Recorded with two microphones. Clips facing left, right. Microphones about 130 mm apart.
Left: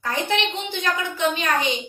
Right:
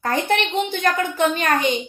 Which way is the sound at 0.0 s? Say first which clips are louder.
Right 3 dB; 50° right (ahead or behind).